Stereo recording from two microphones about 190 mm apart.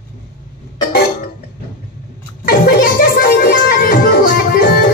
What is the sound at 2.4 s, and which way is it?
Music, 50° left (ahead or behind).